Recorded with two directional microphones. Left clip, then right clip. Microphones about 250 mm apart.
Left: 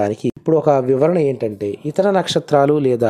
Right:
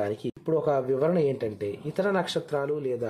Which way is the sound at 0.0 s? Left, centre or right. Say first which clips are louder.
Left 11 dB; left.